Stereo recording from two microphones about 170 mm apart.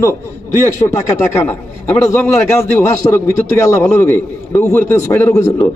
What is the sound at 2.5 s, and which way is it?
A man's voice, 15° left (ahead or behind).